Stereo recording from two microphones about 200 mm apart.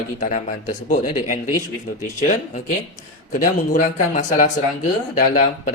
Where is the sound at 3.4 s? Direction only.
40° left (ahead or behind).